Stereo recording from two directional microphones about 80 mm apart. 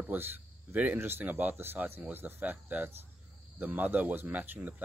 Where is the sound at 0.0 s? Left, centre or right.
Right.